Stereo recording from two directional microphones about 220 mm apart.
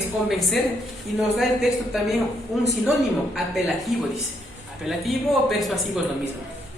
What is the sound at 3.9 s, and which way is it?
Speech, centre (ahead or behind).